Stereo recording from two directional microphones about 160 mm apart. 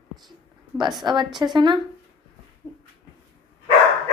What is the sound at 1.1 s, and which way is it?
Speech, 30° right (ahead or behind).